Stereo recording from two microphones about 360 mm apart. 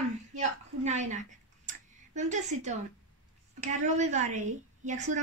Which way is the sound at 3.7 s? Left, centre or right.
Centre.